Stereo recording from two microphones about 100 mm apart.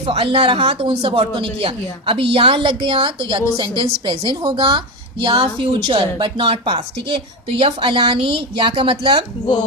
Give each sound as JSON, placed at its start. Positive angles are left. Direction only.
{"t": 0.0, "sound": "a woman's voice", "side_deg": -80}
{"t": 5.2, "sound": "speech", "side_deg": -60}